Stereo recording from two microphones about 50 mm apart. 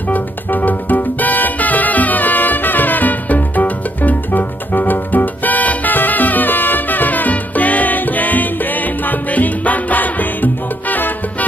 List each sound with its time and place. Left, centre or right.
0.1 s music: left